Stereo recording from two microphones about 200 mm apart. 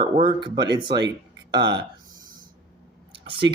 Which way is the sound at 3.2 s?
25° right (ahead or behind).